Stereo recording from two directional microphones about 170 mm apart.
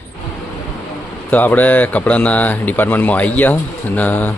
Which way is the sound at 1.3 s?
10° left (ahead or behind).